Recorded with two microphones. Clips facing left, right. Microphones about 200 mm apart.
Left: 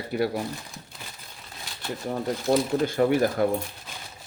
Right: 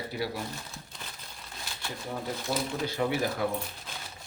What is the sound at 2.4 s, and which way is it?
Speech, 50° left (ahead or behind).